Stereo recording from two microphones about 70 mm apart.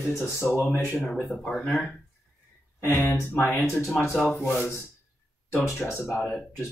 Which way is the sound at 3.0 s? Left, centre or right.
Left.